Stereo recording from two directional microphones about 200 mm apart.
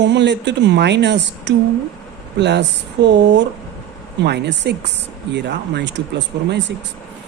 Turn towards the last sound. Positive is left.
turn(degrees=-60)  # may be behind; listen again after turning